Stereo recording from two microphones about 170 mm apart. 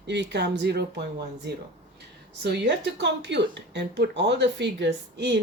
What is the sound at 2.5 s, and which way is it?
Speech, 90° right.